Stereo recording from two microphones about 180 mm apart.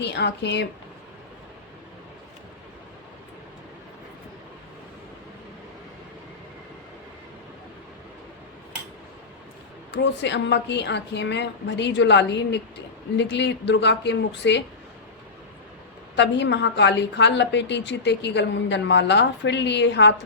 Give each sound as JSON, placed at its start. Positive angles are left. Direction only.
{"t": 0.0, "sound": "a woman's voice", "side_deg": 70}
{"t": 9.9, "sound": "a woman's voice", "side_deg": 75}
{"t": 16.1, "sound": "a woman's voice", "side_deg": 75}